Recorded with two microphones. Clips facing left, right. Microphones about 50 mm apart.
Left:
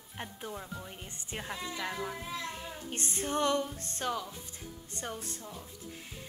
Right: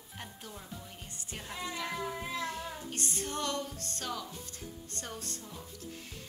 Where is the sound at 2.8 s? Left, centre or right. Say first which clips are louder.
Left 2 dB; left.